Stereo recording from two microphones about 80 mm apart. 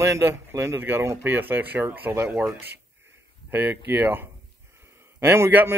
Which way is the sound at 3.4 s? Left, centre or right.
Right.